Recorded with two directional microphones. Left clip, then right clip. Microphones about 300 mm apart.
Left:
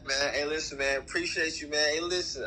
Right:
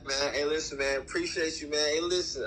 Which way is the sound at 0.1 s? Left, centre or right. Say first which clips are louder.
Left 1 dB; centre.